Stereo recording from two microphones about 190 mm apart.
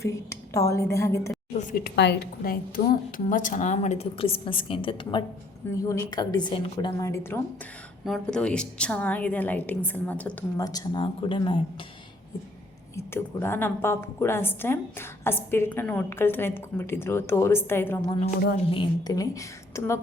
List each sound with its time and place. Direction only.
0.0 s a woman's voice: 15° left (ahead or behind)
1.5 s a woman's voice: 45° left (ahead or behind); by 5.2 s 25° left (ahead or behind)
5.7 s a woman's voice: 15° left (ahead or behind)
8.0 s a woman's voice: centre (ahead or behind)
10.6 s a woman's voice: 20° left (ahead or behind)
13.0 s a woman's voice: 10° left (ahead or behind)